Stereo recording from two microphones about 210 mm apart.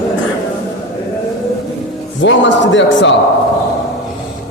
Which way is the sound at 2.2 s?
60° left (ahead or behind).